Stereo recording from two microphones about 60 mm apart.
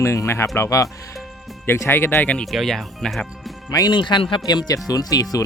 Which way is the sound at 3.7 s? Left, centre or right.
Left.